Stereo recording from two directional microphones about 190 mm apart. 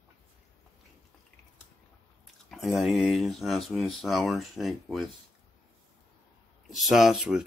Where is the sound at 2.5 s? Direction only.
Centre (ahead or behind).